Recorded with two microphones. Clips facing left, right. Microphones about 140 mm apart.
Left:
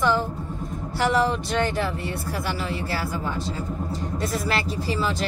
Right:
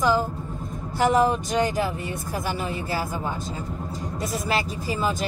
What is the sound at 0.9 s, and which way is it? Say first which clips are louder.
Speech: right 2 dB; 20° right (ahead or behind).